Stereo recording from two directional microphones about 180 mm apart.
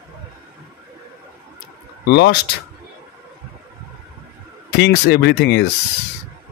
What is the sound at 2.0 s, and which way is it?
Speech, 70° left (ahead or behind).